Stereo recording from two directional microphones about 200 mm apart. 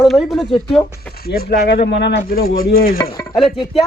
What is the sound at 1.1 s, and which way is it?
Speech, 50° left (ahead or behind).